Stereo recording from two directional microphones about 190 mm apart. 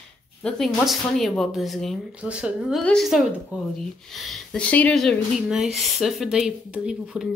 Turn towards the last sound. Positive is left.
turn(degrees=-5)  # may be behind; listen again after turning